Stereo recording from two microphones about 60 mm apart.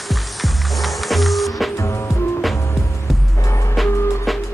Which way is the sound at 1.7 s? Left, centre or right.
Left.